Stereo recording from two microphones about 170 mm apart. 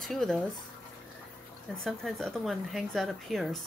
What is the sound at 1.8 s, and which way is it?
Speech, centre (ahead or behind).